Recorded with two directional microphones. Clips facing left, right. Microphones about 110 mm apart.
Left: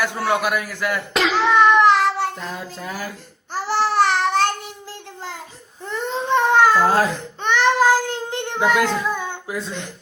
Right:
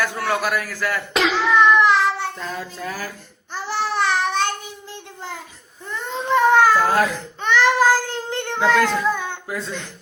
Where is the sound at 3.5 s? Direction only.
35° left (ahead or behind).